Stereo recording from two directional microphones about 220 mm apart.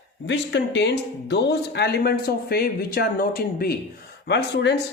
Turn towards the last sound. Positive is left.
turn(degrees=50)  # may be behind; listen again after turning